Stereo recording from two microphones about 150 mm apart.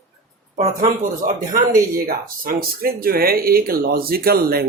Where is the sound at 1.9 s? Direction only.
75° right (ahead or behind); by 4.7 s 90° right.